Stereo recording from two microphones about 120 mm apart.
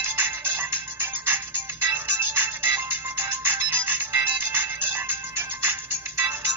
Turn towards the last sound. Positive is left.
turn(degrees=-20)  # may be behind; listen again after turning